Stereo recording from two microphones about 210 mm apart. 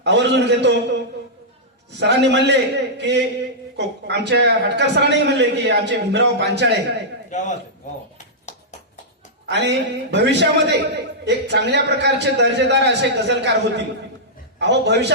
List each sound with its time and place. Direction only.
0.0 s a man's voice: 55° right (ahead or behind)
2.0 s a man's voice: 55° right (ahead or behind)
7.3 s a man's voice: 35° left (ahead or behind)
8.5 s clip-clop: 35° left (ahead or behind)
9.5 s a man's voice: 55° right (ahead or behind)